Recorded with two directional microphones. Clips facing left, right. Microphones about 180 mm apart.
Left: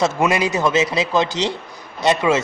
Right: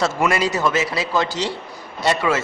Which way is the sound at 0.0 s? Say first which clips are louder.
Left 2 dB; 20° left (ahead or behind).